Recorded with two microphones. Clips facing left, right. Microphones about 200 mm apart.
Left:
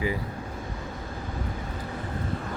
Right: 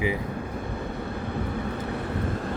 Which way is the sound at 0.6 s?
60° right (ahead or behind).